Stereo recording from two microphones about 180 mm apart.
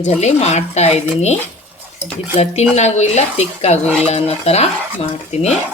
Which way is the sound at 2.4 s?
35° left (ahead or behind).